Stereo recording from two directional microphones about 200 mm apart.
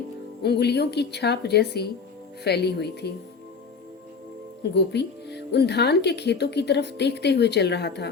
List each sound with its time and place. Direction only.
0.4 s speech: 55° left (ahead or behind)
4.6 s speech: 55° left (ahead or behind)